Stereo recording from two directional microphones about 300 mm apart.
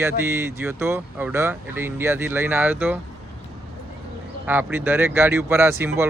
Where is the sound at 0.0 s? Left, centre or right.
Centre.